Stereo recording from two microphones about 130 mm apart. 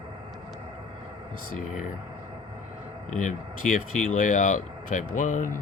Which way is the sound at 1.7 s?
70° left (ahead or behind).